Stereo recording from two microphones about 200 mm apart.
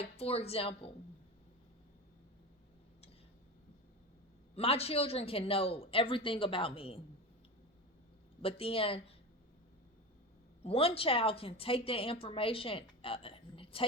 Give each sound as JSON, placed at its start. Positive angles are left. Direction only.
{"t": 0.0, "sound": "a woman's voice", "side_deg": 30}
{"t": 4.5, "sound": "a woman's voice", "side_deg": 30}
{"t": 8.4, "sound": "a woman's voice", "side_deg": 30}
{"t": 10.6, "sound": "a woman's voice", "side_deg": 30}